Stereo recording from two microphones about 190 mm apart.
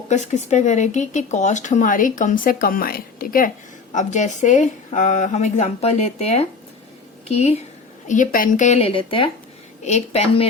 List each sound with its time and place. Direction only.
0.1 s speech: 35° left (ahead or behind)